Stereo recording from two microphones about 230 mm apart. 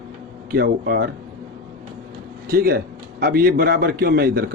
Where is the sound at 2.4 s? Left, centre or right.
Right.